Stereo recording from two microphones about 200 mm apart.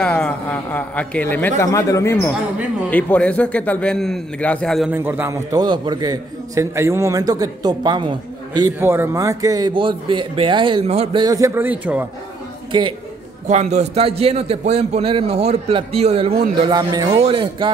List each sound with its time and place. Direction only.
0.0 s a man's voice: 5° left (ahead or behind)
4.9 s a man's voice: 10° right (ahead or behind)
8.7 s a man's voice: 10° right (ahead or behind); by 11.2 s 25° right (ahead or behind)
11.2 s a man's voice: 15° right (ahead or behind)
13.5 s a man's voice: 35° right (ahead or behind)